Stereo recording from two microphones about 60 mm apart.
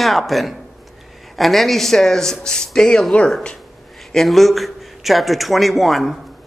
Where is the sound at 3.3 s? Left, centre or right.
Centre.